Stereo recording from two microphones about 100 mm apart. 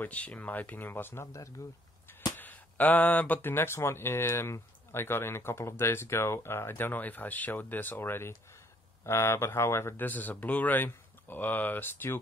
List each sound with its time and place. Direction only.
0.0 s speech: 15° left (ahead or behind); by 1.5 s 30° left (ahead or behind)
2.3 s speech: 20° left (ahead or behind)